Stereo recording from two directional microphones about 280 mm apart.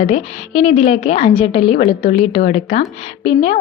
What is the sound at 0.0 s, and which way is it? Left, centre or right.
A woman's voice, left.